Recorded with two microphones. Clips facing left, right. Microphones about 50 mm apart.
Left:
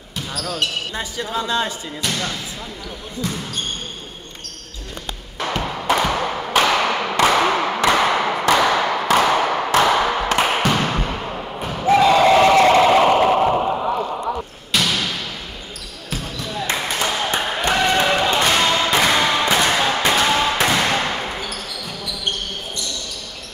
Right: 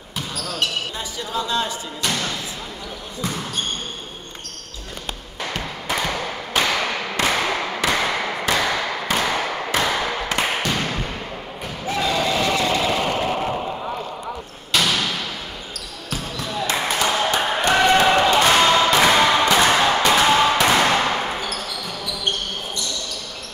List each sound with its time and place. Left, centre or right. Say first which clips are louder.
0.9 s speech: left 2 dB; left
5.4 s thump: left 6 dB; left
6.3 s tap: left 4 dB; left
10.3 s thump: left 3 dB; left
13.2 s a sound: left 7 dB; left
14.7 s basketball bounce: right 1 dB; centre
16.7 s a sound: right 2 dB; centre
17.7 s basketball bounce: right 3 dB; centre
18.4 s a sound: right 2 dB; centre
18.9 s music: right 2 dB; centre
20.1 s a sound: right 2 dB; centre
20.6 s basketball bounce: right 2 dB; centre